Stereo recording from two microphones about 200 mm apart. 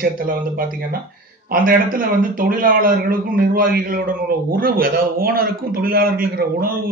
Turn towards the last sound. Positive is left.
turn(degrees=-45)  # may be behind; listen again after turning